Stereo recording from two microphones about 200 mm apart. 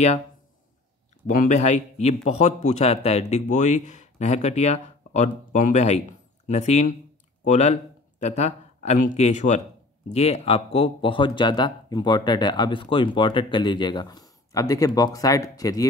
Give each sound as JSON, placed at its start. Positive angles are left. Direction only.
{"t": 1.2, "sound": "a man's voice", "side_deg": 40}